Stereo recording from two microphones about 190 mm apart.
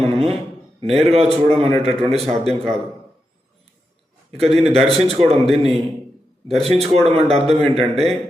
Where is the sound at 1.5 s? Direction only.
30° right (ahead or behind).